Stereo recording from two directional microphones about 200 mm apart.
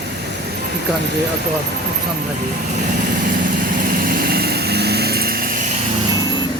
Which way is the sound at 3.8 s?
45° right (ahead or behind).